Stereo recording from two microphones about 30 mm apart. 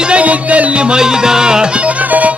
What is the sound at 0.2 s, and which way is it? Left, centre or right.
Music, right.